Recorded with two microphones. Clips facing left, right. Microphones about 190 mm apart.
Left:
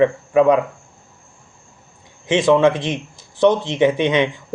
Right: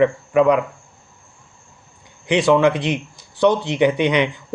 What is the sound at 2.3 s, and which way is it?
Speech, 25° left (ahead or behind).